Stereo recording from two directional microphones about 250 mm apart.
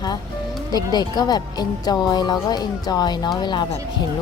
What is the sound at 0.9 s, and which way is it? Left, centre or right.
A woman's voice, centre.